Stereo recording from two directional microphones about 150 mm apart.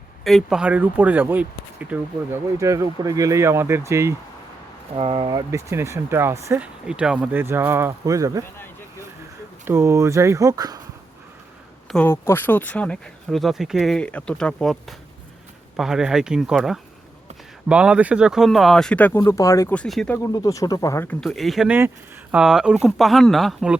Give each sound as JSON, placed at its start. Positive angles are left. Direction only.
{"t": 0.3, "sound": "speech", "side_deg": 0}
{"t": 2.6, "sound": "speech", "side_deg": -20}
{"t": 4.9, "sound": "speech", "side_deg": -40}
{"t": 6.8, "sound": "speech", "side_deg": -5}
{"t": 9.6, "sound": "speech", "side_deg": -15}
{"t": 12.0, "sound": "speech", "side_deg": 15}
{"t": 19.7, "sound": "speech", "side_deg": 5}
{"t": 20.3, "sound": "speech", "side_deg": 20}
{"t": 21.1, "sound": "speech", "side_deg": 5}
{"t": 21.7, "sound": "speech", "side_deg": -15}